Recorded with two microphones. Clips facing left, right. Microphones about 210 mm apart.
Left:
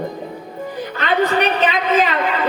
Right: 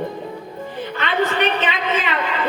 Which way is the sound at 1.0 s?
40° left (ahead or behind).